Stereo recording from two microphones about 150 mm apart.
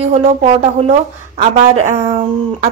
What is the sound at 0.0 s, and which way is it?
A woman's voice, 45° right (ahead or behind).